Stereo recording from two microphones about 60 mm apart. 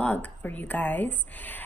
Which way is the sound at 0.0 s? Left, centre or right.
Left.